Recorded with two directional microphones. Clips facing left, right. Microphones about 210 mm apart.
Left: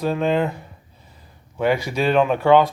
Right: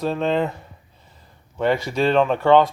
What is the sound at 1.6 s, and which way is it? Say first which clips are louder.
Speech: even; 5° left (ahead or behind).